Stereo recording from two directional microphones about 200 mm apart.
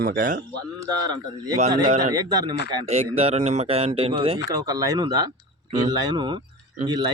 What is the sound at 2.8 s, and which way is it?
A man's voice, 30° right (ahead or behind).